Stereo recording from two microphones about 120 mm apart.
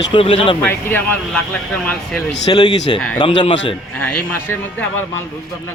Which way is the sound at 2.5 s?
35° left (ahead or behind).